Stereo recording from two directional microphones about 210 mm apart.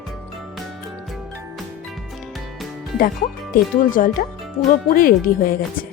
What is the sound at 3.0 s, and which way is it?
Speech, 40° left (ahead or behind).